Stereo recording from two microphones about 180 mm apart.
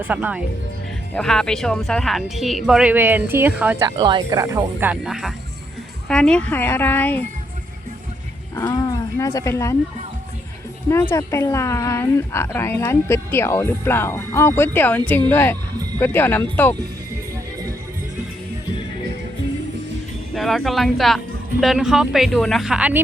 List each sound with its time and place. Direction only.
0.1 s speech: 10° right (ahead or behind)
1.1 s speech: 5° left (ahead or behind)
3.8 s a woman's voice: 25° right (ahead or behind); by 7.3 s 10° left (ahead or behind)
8.5 s a woman's voice: 20° left (ahead or behind)
11.1 s a woman's voice: 15° left (ahead or behind)
20.3 s speech: centre (ahead or behind)